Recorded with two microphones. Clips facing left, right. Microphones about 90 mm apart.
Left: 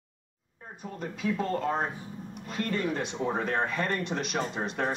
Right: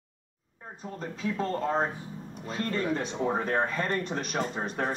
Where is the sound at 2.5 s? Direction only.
35° right (ahead or behind).